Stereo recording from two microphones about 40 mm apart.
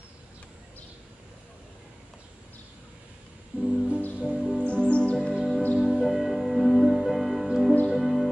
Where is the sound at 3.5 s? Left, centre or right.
Right.